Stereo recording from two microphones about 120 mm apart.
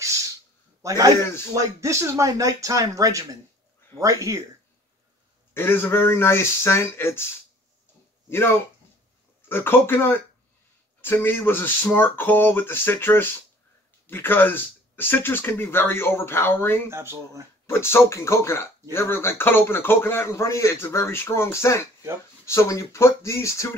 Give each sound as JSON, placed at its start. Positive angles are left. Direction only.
{"t": 0.0, "sound": "a sound", "side_deg": -25}
{"t": 0.8, "sound": "speech", "side_deg": -30}
{"t": 1.2, "sound": "speech", "side_deg": 20}
{"t": 1.5, "sound": "speech", "side_deg": -25}
{"t": 5.5, "sound": "speech", "side_deg": 20}
{"t": 8.3, "sound": "speech", "side_deg": 20}
{"t": 16.9, "sound": "speech", "side_deg": -20}
{"t": 17.6, "sound": "speech", "side_deg": 20}